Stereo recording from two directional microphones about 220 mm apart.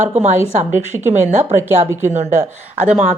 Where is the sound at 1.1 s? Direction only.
30° right (ahead or behind).